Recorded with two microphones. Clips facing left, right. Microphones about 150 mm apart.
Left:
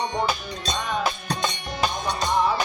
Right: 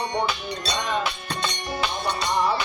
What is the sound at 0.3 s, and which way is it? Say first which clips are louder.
Music: left 1 dB; 45° left (ahead or behind).